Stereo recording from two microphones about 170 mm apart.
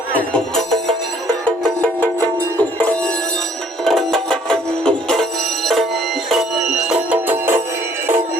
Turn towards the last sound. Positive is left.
turn(degrees=-10)  # may be behind; listen again after turning